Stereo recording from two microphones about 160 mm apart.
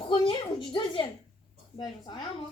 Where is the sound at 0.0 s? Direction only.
30° left (ahead or behind).